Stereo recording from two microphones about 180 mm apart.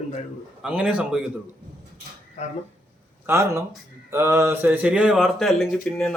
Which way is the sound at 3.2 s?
15° right (ahead or behind).